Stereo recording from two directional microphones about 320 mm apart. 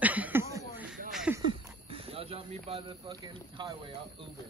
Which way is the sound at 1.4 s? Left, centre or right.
Centre.